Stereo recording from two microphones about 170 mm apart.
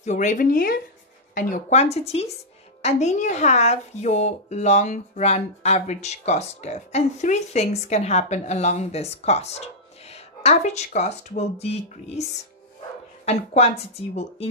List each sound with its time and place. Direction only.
0.0 s speech: 45° left (ahead or behind)
1.3 s speech: 45° left (ahead or behind)